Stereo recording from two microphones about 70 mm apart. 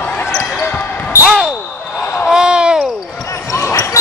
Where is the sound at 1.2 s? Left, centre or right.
Centre.